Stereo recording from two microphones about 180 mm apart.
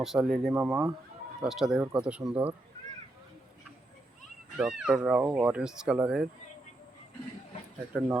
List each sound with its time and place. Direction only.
0.0 s speech: centre (ahead or behind)
0.5 s speech: 10° right (ahead or behind)
4.5 s speech: 5° right (ahead or behind)